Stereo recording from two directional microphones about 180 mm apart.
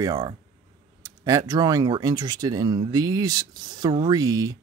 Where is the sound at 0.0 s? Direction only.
20° right (ahead or behind).